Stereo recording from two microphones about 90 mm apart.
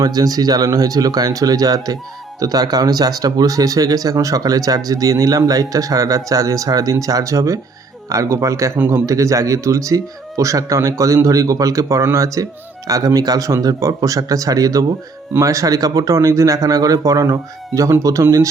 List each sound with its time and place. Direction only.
0.0 s speech: 45° right (ahead or behind)